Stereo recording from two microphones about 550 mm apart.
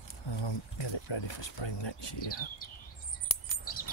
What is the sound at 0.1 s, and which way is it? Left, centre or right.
Speech, left.